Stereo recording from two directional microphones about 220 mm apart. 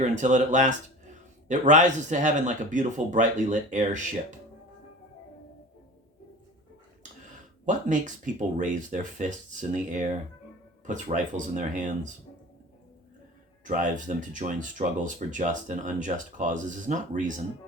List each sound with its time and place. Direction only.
0.0 s speech: 35° right (ahead or behind)
7.6 s speech: 35° right (ahead or behind)
13.7 s speech: 35° right (ahead or behind)